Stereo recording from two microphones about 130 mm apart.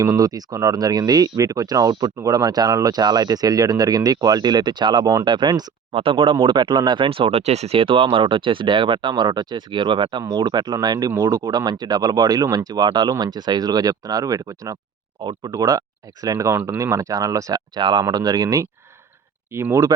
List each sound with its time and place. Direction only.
0.0 s speech: 30° right (ahead or behind)
5.9 s speech: 45° right (ahead or behind); by 19.9 s 20° right (ahead or behind)